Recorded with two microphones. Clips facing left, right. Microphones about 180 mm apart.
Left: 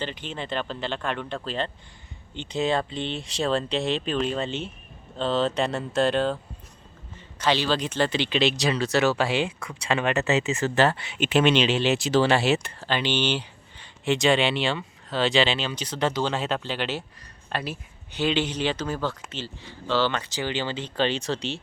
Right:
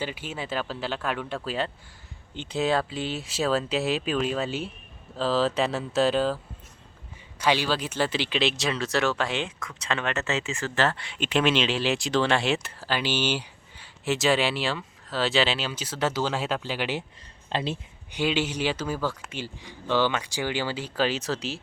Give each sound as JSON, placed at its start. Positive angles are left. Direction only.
{"t": 0.0, "sound": "speech", "side_deg": -10}
{"t": 10.9, "sound": "speech", "side_deg": 5}
{"t": 17.5, "sound": "speech", "side_deg": -25}
{"t": 18.1, "sound": "speech", "side_deg": -10}